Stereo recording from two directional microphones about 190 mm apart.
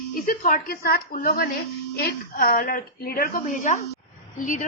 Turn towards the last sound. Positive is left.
turn(degrees=40)  # may be behind; listen again after turning